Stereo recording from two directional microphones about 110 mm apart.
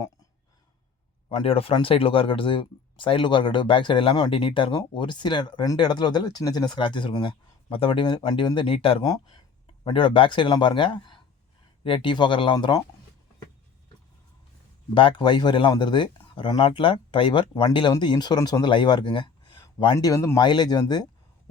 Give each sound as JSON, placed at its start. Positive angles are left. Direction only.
{"t": 1.5, "sound": "speech", "side_deg": 60}
{"t": 9.0, "sound": "speech", "side_deg": 40}
{"t": 9.8, "sound": "speech", "side_deg": 50}
{"t": 14.9, "sound": "speech", "side_deg": 45}
{"t": 20.4, "sound": "speech", "side_deg": 45}